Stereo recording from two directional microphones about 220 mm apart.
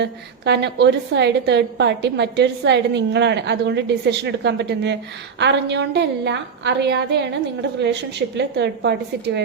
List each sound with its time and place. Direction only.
0.0 s a woman's voice: 50° right (ahead or behind)
8.4 s a woman's voice: 50° right (ahead or behind)